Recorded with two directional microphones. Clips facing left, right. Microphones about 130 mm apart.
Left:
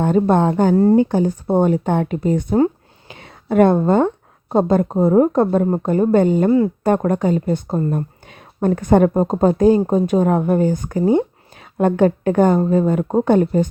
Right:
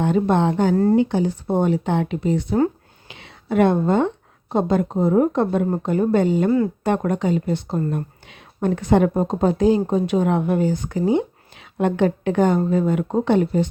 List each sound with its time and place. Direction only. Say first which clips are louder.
0.0 s speech: left 3 dB; 45° left (ahead or behind)